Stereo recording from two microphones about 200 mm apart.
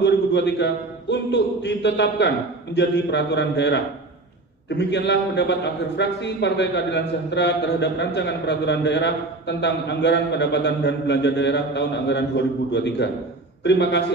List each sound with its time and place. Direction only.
0.0 s a man's voice: 60° left (ahead or behind)